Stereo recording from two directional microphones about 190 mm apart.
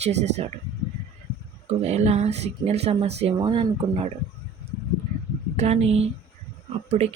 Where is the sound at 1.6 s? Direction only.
35° right (ahead or behind).